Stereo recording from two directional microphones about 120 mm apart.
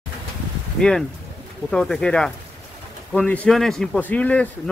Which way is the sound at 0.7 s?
5° left (ahead or behind).